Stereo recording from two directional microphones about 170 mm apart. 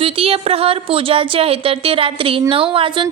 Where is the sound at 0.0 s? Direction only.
35° right (ahead or behind).